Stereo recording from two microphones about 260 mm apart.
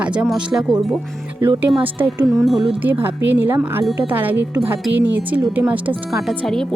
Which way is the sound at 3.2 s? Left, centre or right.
Right.